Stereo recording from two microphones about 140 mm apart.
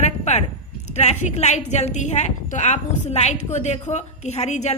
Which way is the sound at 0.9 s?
55° left (ahead or behind).